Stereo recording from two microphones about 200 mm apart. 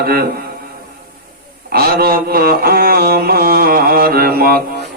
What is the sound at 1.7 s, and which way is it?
Mantra, 50° right (ahead or behind).